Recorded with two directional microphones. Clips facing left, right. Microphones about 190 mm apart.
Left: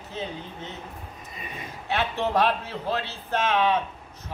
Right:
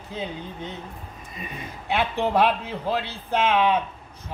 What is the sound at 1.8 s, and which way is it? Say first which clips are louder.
A man's voice: right 2 dB; 15° right (ahead or behind).